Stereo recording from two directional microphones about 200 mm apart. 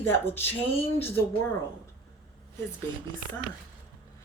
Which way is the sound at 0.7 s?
30° left (ahead or behind).